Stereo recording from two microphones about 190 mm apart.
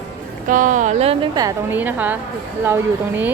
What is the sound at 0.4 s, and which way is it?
Speech, 45° right (ahead or behind).